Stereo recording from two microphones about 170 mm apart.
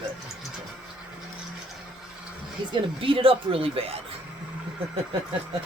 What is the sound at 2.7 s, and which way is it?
Speech, 30° right (ahead or behind).